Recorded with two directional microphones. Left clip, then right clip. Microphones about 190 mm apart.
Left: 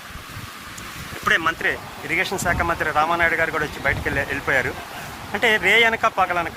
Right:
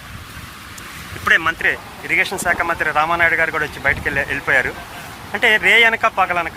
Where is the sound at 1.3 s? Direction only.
15° left (ahead or behind).